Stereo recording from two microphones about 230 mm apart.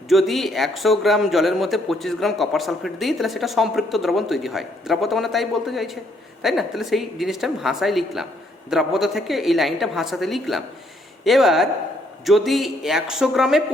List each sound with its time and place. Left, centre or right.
0.1 s speech: centre